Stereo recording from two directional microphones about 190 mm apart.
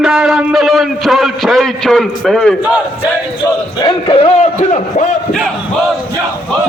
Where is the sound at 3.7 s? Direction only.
25° left (ahead or behind).